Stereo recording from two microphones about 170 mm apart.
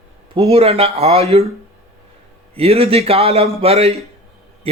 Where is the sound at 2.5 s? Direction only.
35° right (ahead or behind).